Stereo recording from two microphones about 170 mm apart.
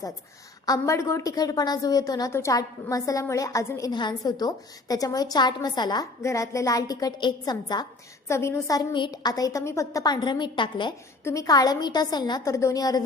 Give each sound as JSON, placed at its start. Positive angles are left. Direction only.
{"t": 0.6, "sound": "a woman's voice", "side_deg": 20}
{"t": 11.2, "sound": "a woman's voice", "side_deg": 15}